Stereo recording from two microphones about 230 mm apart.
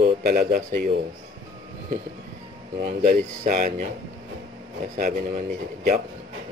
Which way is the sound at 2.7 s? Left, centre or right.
Right.